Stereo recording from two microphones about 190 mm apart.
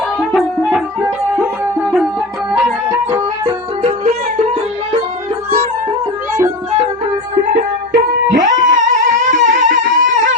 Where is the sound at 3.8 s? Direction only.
35° right (ahead or behind).